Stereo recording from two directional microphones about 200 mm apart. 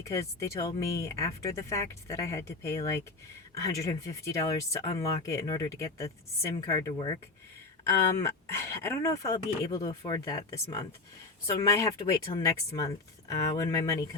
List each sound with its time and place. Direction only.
0.0 s speech: 15° left (ahead or behind)